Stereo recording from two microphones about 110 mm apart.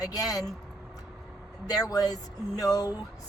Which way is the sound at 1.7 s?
35° left (ahead or behind).